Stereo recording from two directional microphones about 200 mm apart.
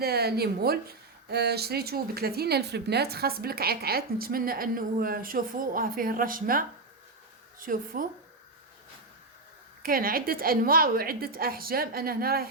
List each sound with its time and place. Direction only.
0.0 s speech: 50° right (ahead or behind)
9.8 s speech: 45° right (ahead or behind)